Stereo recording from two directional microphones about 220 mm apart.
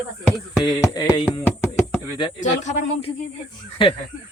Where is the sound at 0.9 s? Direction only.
20° left (ahead or behind).